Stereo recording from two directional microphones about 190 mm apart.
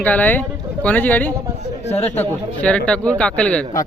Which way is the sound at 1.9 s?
35° left (ahead or behind).